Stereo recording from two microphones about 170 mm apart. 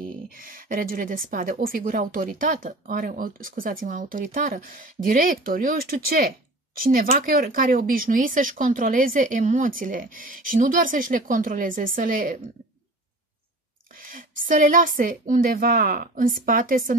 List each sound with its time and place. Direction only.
0.3 s a woman's voice: 55° right (ahead or behind)
13.9 s a woman's voice: 55° right (ahead or behind)